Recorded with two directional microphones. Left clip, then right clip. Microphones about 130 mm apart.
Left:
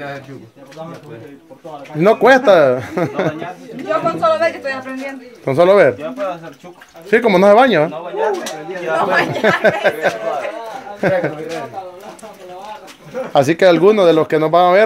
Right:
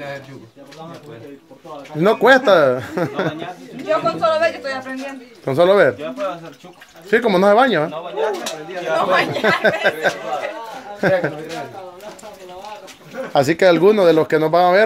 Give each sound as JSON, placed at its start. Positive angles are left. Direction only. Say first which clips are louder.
{"t": 2.0, "sound": "speech", "louder": "left 2 dB", "side_deg": 0}
{"t": 3.8, "sound": "speech", "louder": "left 2 dB", "side_deg": 15}
{"t": 5.4, "sound": "speech", "louder": "left 3 dB", "side_deg": 5}
{"t": 8.9, "sound": "speech", "louder": "left 1 dB", "side_deg": -5}
{"t": 9.4, "sound": "speech", "louder": "left 3 dB", "side_deg": 10}
{"t": 11.0, "sound": "a man's voice", "louder": "left 1 dB", "side_deg": -10}
{"t": 13.3, "sound": "speech", "louder": "left 2 dB", "side_deg": -5}